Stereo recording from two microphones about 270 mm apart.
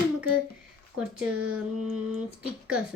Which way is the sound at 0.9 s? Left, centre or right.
Centre.